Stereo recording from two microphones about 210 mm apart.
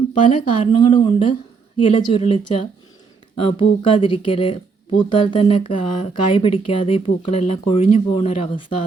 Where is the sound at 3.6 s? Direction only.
25° left (ahead or behind).